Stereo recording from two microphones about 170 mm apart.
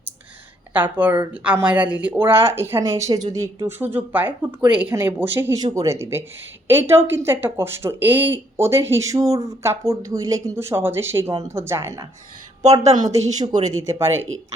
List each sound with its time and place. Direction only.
0.7 s speech: 10° right (ahead or behind)
13.7 s speech: 15° right (ahead or behind)